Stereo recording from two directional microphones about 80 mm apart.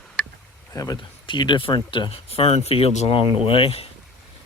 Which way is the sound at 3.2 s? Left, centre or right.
Left.